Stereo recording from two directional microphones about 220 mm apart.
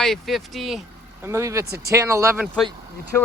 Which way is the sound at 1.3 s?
15° right (ahead or behind).